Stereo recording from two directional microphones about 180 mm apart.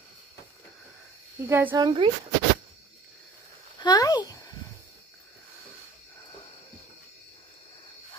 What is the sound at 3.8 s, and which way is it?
Speech, 20° left (ahead or behind).